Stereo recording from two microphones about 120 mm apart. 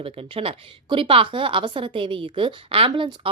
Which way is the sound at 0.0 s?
50° right (ahead or behind).